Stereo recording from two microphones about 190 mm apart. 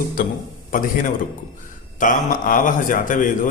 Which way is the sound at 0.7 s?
45° left (ahead or behind).